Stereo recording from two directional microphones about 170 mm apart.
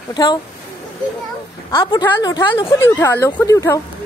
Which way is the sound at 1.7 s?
30° left (ahead or behind).